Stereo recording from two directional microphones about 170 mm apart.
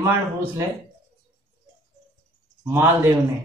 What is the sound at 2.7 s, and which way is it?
Speech, 15° right (ahead or behind).